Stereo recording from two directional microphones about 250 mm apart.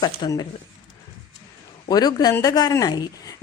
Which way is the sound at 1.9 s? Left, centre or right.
Centre.